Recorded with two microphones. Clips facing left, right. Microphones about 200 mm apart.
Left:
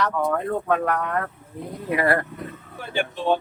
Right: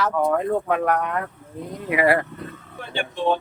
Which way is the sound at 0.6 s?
15° right (ahead or behind).